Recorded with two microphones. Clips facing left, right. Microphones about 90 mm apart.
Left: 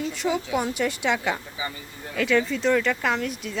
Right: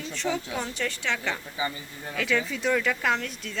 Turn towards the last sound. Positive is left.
turn(degrees=5)  # may be behind; listen again after turning